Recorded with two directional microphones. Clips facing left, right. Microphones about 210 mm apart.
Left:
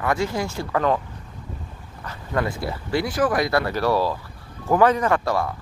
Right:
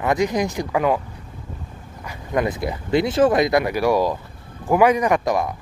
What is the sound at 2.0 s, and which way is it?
Speech, 20° right (ahead or behind).